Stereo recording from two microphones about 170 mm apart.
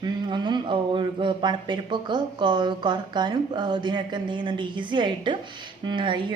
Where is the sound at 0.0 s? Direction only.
25° right (ahead or behind).